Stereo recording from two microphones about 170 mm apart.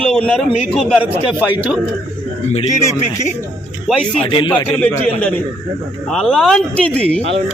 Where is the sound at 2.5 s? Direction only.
35° left (ahead or behind).